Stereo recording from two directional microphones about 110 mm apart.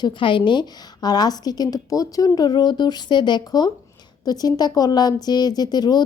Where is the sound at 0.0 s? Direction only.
50° left (ahead or behind).